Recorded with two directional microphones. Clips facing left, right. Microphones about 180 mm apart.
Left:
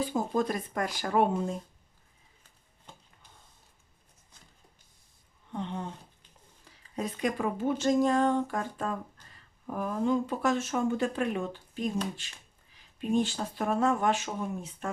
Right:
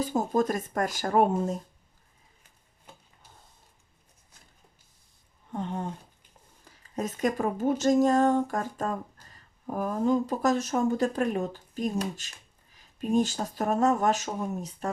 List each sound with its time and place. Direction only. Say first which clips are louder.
0.0 s speech: right 3 dB; 45° right (ahead or behind)
5.5 s speech: right 3 dB; 45° right (ahead or behind)